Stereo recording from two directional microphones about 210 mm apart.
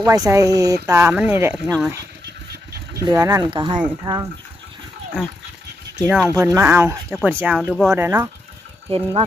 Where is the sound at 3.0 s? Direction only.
15° right (ahead or behind).